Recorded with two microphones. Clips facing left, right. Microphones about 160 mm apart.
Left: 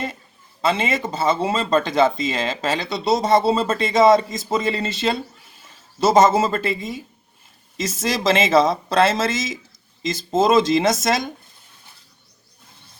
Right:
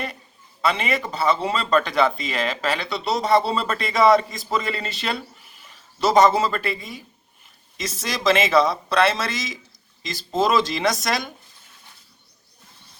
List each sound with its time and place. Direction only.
0.6 s speech: 25° left (ahead or behind)
8.0 s speech: 25° left (ahead or behind)